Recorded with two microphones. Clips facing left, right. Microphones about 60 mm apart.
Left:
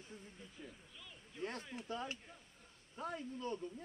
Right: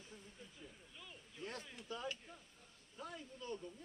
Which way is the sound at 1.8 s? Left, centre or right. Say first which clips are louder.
Left 1 dB; left.